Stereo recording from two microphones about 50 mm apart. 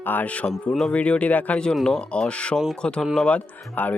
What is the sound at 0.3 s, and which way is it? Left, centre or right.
Speech, left.